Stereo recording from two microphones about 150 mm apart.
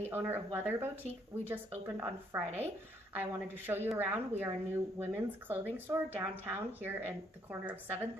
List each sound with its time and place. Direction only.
0.0 s a woman's voice: 15° right (ahead or behind)